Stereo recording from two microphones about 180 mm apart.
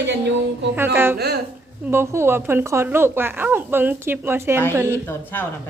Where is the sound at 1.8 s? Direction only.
15° right (ahead or behind).